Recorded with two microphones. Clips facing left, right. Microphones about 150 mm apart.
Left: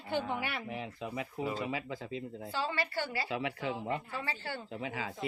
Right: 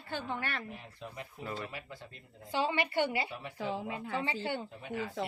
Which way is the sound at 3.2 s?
90° left.